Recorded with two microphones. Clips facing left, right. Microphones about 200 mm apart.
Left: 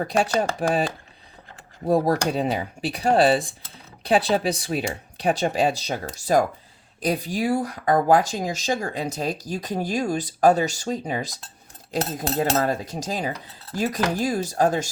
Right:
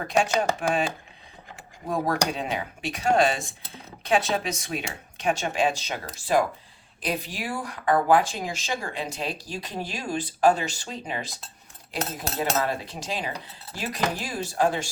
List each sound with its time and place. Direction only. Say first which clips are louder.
0.3 s speech: left 2 dB; 35° left (ahead or behind)
1.9 s speech: left 6 dB; 35° left (ahead or behind)